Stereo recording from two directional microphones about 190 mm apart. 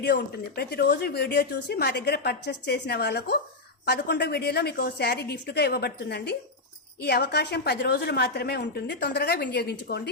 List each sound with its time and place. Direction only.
0.0 s speech: 60° left (ahead or behind)